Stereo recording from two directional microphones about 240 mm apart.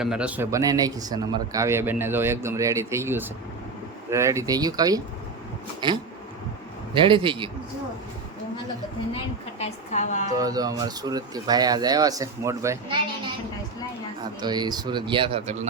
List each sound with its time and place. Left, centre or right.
0.0 s a man's voice: centre; by 7.5 s right
9.6 s a woman's voice: left
10.3 s a man's voice: centre
14.4 s speech: centre